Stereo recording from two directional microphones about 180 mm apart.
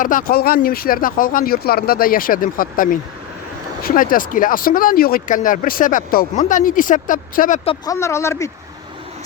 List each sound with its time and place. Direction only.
0.0 s speech: 50° left (ahead or behind)
7.9 s speech: 15° left (ahead or behind)